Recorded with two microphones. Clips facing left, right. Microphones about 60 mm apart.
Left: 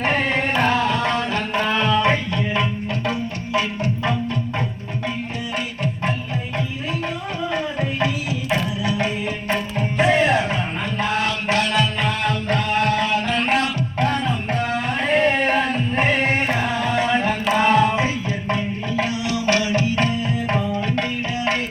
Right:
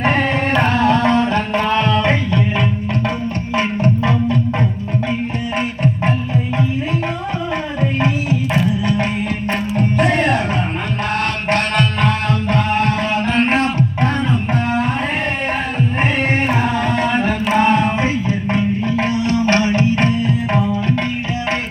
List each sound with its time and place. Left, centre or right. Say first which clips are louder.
0.6 s music: right 6 dB; right
3.5 s music: right 5 dB; right
5.5 s music: right 7 dB; right
9.7 s music: right 2 dB; right
16.2 s carnatic music: right 3 dB; right
17.5 s music: right 2 dB; right
18.9 s music: right 3 dB; right